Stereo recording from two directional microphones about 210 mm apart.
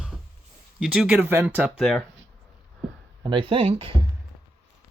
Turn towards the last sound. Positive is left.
turn(degrees=-25)  # may be behind; listen again after turning